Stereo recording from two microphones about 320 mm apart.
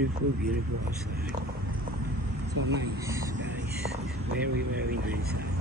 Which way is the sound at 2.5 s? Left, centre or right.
Right.